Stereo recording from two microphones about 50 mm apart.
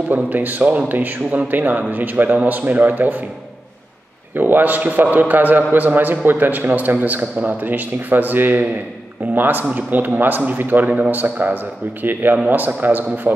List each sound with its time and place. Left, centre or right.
0.1 s a man's voice: right
4.4 s a man's voice: right